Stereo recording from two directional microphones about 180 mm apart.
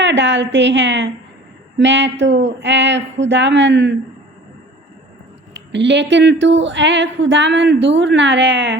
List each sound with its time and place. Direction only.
0.0 s speech: 90° right
5.5 s speech: 80° right